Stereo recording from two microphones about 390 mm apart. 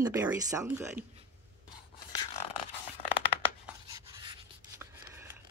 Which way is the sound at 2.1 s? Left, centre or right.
Centre.